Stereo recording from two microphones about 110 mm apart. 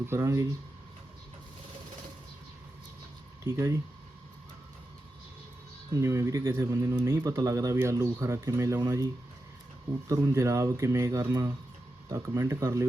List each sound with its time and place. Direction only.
0.1 s speech: 25° right (ahead or behind)
3.4 s speech: 25° right (ahead or behind)
6.0 s speech: 25° right (ahead or behind)
10.1 s speech: 25° right (ahead or behind)